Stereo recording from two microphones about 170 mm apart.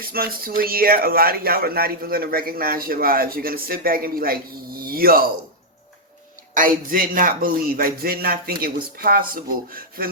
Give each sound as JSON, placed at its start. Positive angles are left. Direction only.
{"t": 0.0, "sound": "speech", "side_deg": -60}
{"t": 6.5, "sound": "speech", "side_deg": -55}